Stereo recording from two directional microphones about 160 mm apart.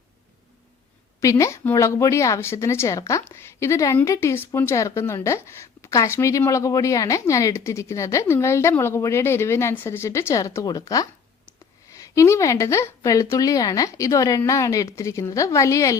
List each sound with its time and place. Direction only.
1.2 s a woman's voice: 20° left (ahead or behind)